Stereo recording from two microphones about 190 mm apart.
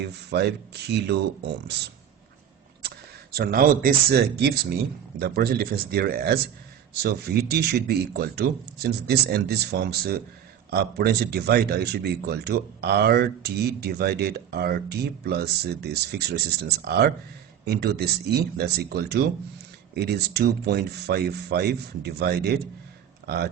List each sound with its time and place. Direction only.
0.0 s speech: 60° right (ahead or behind)
3.3 s speech: 50° right (ahead or behind)